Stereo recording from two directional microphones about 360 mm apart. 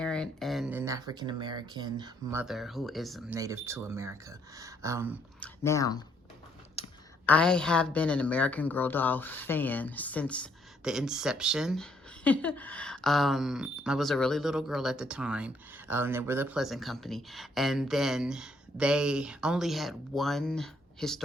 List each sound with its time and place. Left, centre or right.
0.0 s speech: centre
5.4 s speech: centre
6.8 s a sound: centre
7.3 s a woman's voice: centre